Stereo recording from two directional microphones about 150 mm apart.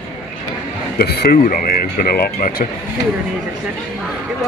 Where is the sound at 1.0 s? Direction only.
85° left.